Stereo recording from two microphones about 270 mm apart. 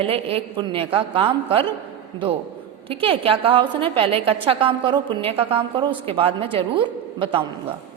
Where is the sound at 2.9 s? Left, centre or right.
Right.